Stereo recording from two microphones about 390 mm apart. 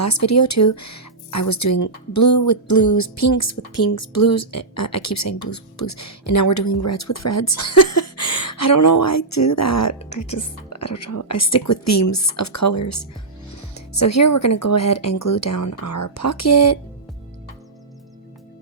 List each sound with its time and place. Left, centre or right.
0.0 s speech: left
10.0 s speech: centre
10.7 s speech: left